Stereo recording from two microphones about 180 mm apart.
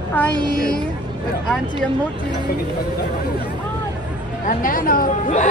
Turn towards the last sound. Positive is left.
turn(degrees=50)  # may be behind; listen again after turning